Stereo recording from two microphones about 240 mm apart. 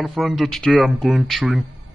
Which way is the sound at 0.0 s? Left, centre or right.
Centre.